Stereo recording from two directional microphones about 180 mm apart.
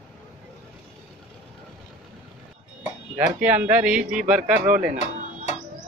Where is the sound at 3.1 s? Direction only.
10° right (ahead or behind).